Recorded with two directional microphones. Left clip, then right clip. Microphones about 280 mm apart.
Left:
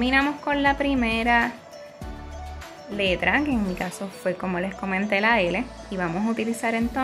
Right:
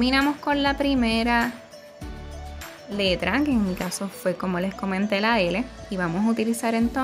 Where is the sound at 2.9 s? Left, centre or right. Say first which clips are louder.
Left 1 dB; right.